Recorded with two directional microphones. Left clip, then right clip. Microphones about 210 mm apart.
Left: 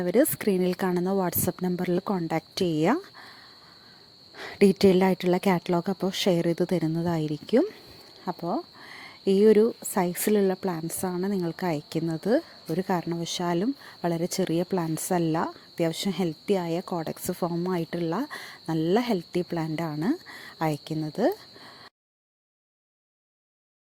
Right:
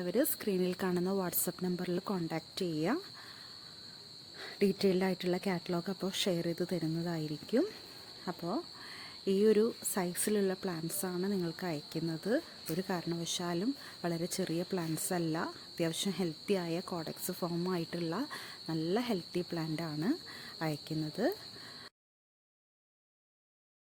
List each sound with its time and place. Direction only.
0.0 s speech: 30° left (ahead or behind)
4.4 s speech: 35° left (ahead or behind)